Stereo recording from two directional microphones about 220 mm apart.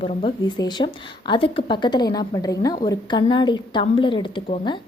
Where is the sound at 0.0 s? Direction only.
25° left (ahead or behind).